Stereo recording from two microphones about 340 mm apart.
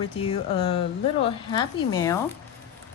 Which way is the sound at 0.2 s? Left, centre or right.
Centre.